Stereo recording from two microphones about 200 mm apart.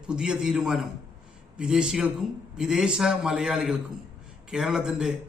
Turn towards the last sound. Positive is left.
turn(degrees=-5)  # may be behind; listen again after turning